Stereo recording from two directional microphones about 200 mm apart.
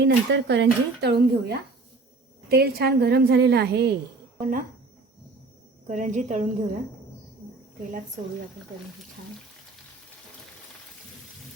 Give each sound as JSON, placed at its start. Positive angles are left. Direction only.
{"t": 0.0, "sound": "a woman's voice", "side_deg": -60}
{"t": 5.9, "sound": "a woman's voice", "side_deg": -35}